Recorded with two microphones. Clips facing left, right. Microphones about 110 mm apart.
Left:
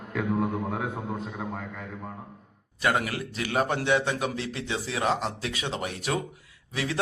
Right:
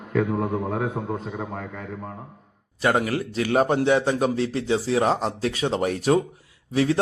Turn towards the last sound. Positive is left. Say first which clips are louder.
# right 8 dB
turn(degrees=-35)  # may be behind; listen again after turning